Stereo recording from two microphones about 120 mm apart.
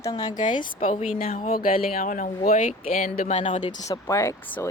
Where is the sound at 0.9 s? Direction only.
75° left (ahead or behind); by 1.4 s 60° left (ahead or behind).